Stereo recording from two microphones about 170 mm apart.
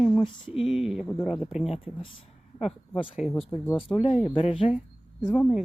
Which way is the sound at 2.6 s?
Centre (ahead or behind).